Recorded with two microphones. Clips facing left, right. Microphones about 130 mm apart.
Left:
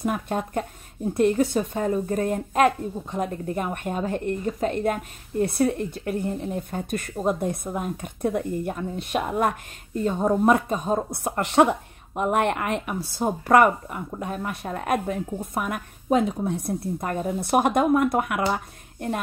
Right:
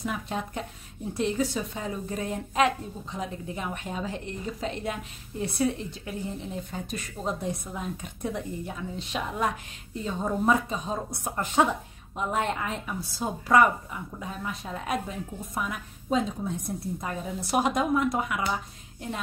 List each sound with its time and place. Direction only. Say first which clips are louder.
0.0 s a woman's voice: left 6 dB; 50° left (ahead or behind)
11.2 s speech: left 5 dB; 70° left (ahead or behind)